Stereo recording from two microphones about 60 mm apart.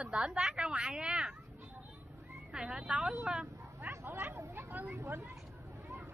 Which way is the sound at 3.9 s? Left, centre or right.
Right.